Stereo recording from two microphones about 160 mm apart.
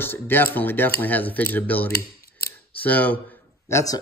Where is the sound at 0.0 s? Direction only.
15° left (ahead or behind).